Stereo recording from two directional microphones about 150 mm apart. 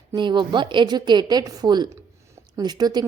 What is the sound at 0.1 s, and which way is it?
Speech, 30° right (ahead or behind).